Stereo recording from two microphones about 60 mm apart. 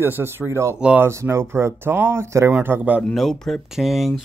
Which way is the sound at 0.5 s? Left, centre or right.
Right.